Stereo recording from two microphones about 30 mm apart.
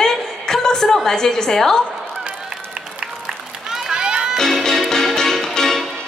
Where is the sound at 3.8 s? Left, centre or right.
Right.